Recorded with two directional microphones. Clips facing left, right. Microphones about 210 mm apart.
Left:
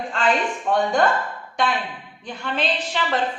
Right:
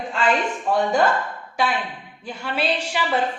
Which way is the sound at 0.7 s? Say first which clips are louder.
Even; 5° right (ahead or behind).